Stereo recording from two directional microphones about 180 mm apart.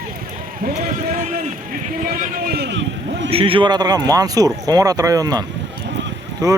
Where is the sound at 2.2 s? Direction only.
60° right (ahead or behind); by 3.3 s 85° right.